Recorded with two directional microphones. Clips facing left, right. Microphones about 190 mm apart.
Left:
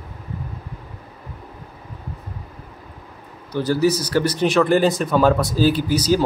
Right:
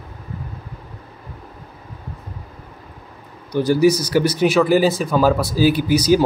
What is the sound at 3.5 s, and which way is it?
Speech, 15° right (ahead or behind).